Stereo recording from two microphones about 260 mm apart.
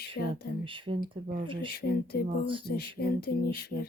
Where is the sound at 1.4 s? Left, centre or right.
Centre.